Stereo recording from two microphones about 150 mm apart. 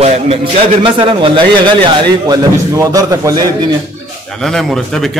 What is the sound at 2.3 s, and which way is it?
A man's voice, 25° right (ahead or behind).